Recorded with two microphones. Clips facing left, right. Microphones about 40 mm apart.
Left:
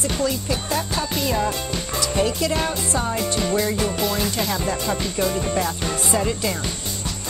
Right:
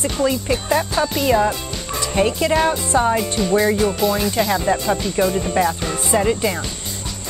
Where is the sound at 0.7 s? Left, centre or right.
Right.